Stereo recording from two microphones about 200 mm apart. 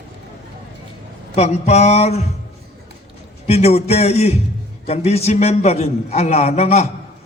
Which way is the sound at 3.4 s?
30° left (ahead or behind).